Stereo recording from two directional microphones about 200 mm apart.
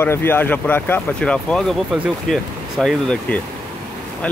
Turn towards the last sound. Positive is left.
turn(degrees=0)  # may be behind; listen again after turning